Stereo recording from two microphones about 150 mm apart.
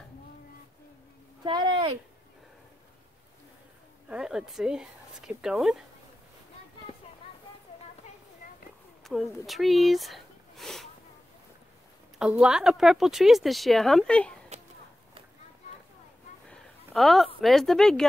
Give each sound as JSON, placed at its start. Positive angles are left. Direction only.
{"t": 1.4, "sound": "speech", "side_deg": -30}
{"t": 4.1, "sound": "speech", "side_deg": -5}
{"t": 9.0, "sound": "speech", "side_deg": 0}
{"t": 12.2, "sound": "speech", "side_deg": -5}
{"t": 14.5, "sound": "a sound", "side_deg": -50}
{"t": 16.4, "sound": "a sound", "side_deg": 0}
{"t": 17.4, "sound": "speech", "side_deg": 0}